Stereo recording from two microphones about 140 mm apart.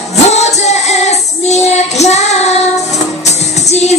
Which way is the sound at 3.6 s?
50° left (ahead or behind).